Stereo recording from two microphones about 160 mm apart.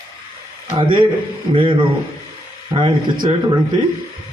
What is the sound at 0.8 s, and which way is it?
A man's voice, 30° right (ahead or behind).